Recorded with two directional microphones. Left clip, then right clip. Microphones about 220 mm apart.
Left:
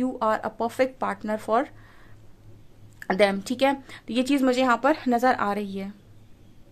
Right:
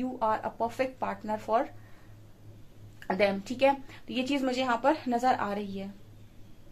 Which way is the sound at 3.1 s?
45° left (ahead or behind).